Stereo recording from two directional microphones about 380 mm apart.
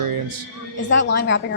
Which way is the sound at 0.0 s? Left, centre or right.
Right.